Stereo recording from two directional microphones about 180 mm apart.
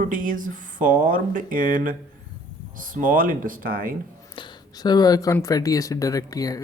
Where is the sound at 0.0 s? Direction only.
45° right (ahead or behind).